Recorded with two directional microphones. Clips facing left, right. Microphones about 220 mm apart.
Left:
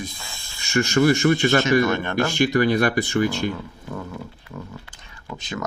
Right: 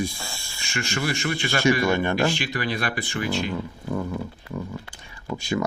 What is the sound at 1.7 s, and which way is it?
Speech, 15° right (ahead or behind).